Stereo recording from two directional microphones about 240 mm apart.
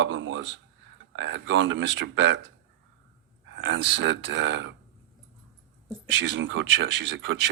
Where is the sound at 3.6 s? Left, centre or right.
Right.